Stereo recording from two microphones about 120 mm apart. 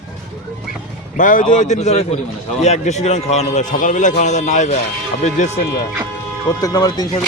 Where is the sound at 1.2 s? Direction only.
90° left.